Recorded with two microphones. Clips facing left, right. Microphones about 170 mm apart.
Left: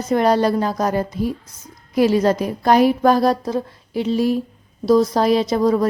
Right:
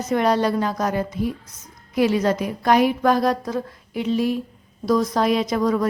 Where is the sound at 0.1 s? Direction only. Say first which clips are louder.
Left 3 dB; 35° left (ahead or behind).